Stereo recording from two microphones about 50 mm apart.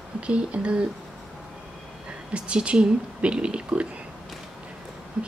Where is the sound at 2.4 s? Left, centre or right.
Right.